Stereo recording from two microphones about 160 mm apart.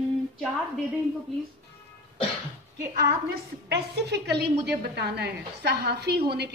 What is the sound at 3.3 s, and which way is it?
A woman's voice, 90° right.